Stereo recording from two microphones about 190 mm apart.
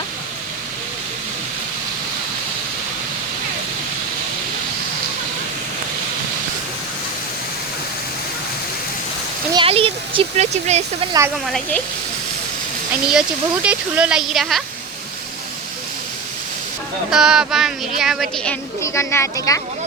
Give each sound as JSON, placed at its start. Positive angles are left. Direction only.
{"t": 9.5, "sound": "a sound", "side_deg": -25}
{"t": 11.4, "sound": "speech", "side_deg": 5}
{"t": 13.1, "sound": "speech", "side_deg": -5}
{"t": 17.1, "sound": "speech", "side_deg": -5}
{"t": 18.8, "sound": "speech", "side_deg": 15}